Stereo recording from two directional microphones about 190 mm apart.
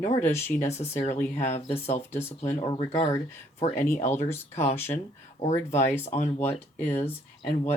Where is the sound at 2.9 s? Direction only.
35° left (ahead or behind).